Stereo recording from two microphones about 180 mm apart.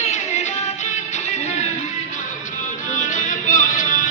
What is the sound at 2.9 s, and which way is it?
Music, 45° left (ahead or behind).